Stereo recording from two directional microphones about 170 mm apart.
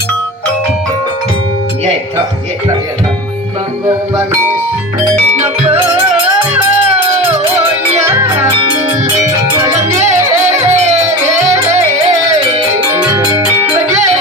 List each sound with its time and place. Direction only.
8.0 s music: 15° right (ahead or behind)
10.1 s music: 40° right (ahead or behind)